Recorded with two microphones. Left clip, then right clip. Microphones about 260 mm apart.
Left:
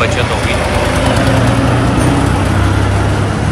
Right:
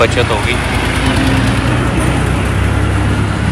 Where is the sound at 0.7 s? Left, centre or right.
Left.